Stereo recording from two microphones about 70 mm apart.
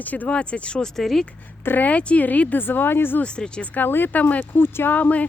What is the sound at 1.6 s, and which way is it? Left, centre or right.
Speech, left.